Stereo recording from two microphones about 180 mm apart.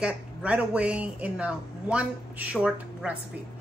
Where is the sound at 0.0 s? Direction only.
5° right (ahead or behind).